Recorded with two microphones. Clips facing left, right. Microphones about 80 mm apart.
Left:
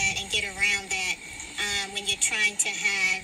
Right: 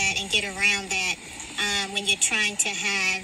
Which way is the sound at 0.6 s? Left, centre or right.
Right.